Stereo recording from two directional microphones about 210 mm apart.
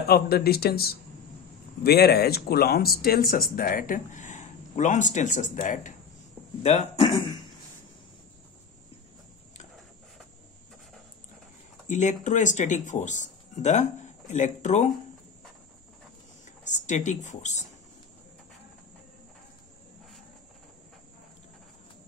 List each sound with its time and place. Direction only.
0.0 s speech: 50° left (ahead or behind); by 7.2 s 30° left (ahead or behind)
11.9 s speech: 35° left (ahead or behind)
16.6 s speech: 35° left (ahead or behind)